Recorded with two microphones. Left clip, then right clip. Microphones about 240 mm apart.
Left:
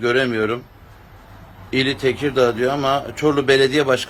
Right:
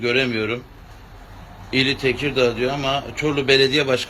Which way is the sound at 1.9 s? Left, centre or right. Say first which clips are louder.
Left 2 dB; centre.